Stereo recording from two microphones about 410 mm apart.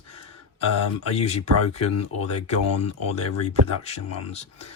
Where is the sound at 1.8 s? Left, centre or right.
Left.